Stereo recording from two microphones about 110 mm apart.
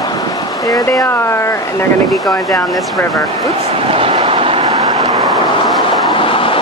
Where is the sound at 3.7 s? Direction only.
60° right (ahead or behind).